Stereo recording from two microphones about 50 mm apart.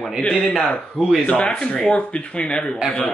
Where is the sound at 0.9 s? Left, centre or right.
Centre.